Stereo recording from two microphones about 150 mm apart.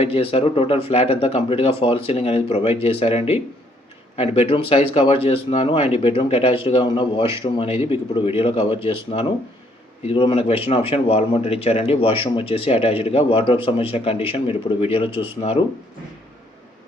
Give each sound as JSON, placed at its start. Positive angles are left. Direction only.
{"t": 0.0, "sound": "speech", "side_deg": 40}